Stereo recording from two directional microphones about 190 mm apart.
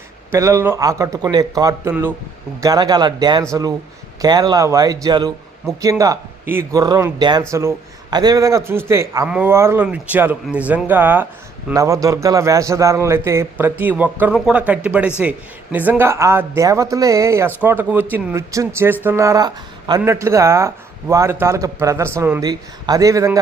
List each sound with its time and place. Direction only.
0.3 s a man's voice: 15° right (ahead or behind)